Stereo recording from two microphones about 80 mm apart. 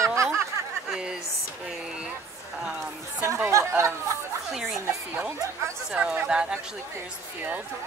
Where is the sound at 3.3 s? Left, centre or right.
Right.